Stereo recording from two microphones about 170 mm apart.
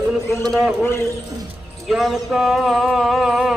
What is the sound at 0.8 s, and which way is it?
Speech, 15° left (ahead or behind).